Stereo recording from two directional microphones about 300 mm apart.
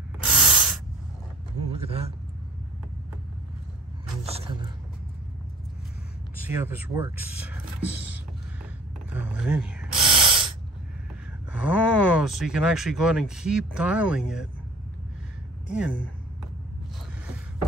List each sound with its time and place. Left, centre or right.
0.3 s spray: centre
1.7 s vehicle: centre
4.2 s a sound: centre
6.5 s speech: centre
9.4 s a sound: centre
10.0 s gasp: centre
11.7 s speech: centre
15.7 s speech: centre